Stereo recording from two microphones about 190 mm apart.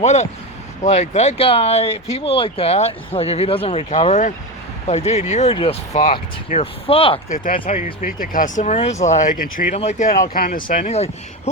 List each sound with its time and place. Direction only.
0.0 s speech: 35° left (ahead or behind)
7.3 s speech: 45° left (ahead or behind)
10.3 s speech: 50° left (ahead or behind)